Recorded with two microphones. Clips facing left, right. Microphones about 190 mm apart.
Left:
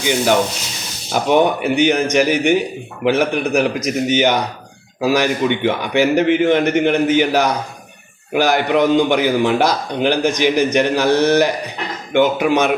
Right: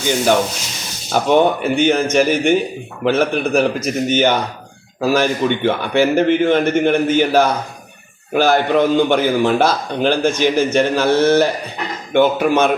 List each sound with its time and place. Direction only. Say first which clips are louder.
1.1 s a man's voice: right 1 dB; 15° left (ahead or behind)